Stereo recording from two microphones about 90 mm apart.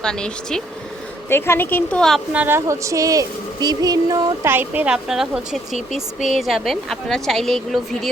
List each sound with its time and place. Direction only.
0.0 s speech: 10° left (ahead or behind)
1.3 s speech: 25° left (ahead or behind)
2.0 s speech: 5° left (ahead or behind)
2.3 s a woman's voice: 20° right (ahead or behind)
2.6 s speech: 35° right (ahead or behind)
4.4 s a woman's voice: 20° right (ahead or behind)
5.0 s speech: 5° right (ahead or behind)